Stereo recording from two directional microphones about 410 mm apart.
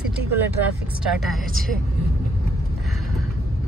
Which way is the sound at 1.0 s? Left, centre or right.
Centre.